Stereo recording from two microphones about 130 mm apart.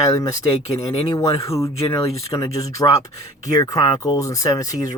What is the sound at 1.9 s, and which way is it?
Speech, 25° left (ahead or behind).